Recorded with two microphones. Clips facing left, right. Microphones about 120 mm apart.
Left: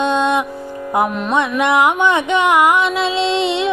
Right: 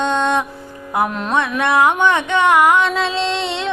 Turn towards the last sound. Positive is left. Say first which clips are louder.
# left 4 dB
turn(degrees=15)  # may be behind; listen again after turning